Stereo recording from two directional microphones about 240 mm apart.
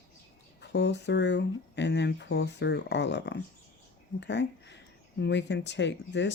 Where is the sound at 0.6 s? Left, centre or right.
Left.